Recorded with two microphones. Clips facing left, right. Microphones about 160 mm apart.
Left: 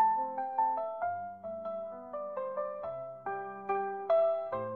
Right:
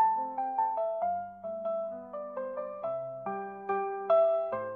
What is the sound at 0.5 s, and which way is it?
Music, 15° right (ahead or behind).